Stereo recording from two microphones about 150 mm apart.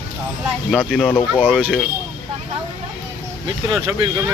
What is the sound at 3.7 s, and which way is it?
Speech, 15° right (ahead or behind).